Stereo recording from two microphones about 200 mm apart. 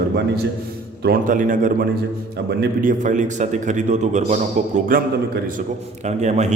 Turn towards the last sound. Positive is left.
turn(degrees=-35)  # may be behind; listen again after turning